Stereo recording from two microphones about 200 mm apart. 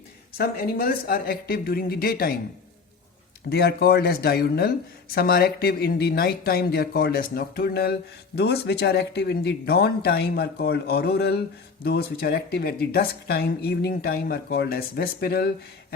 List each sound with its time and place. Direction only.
0.3 s speech: 50° left (ahead or behind)
3.5 s speech: 50° left (ahead or behind)